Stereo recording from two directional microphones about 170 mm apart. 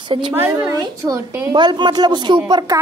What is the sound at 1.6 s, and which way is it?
A woman's voice, 25° right (ahead or behind).